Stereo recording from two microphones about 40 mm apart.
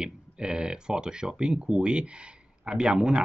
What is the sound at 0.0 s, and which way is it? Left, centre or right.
Speech, right.